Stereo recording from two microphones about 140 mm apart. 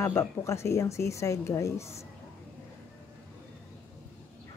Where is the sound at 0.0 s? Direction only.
20° left (ahead or behind).